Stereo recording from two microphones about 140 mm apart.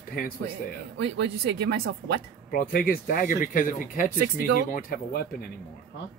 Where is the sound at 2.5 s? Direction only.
90° left.